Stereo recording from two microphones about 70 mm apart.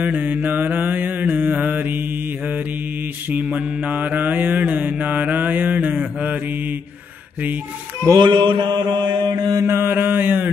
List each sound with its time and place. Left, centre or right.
0.0 s mantra: right
8.1 s mantra: right
9.7 s mantra: right